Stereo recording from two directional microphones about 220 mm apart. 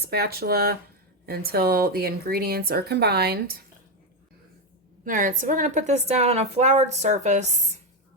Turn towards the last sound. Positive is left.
turn(degrees=-30)  # may be behind; listen again after turning